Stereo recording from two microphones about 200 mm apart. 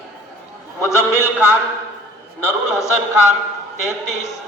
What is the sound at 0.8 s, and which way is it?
Speech, 15° left (ahead or behind).